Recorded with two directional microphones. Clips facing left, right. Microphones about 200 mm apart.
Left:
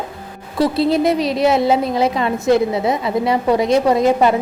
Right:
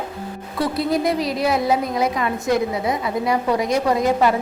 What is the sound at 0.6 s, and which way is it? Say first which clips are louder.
A woman's voice: left 5 dB; 25° left (ahead or behind).